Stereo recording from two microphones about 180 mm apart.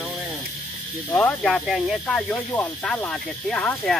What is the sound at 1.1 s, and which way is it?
Speech, 10° left (ahead or behind).